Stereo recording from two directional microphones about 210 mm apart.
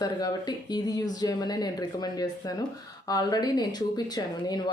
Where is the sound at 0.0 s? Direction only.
20° left (ahead or behind).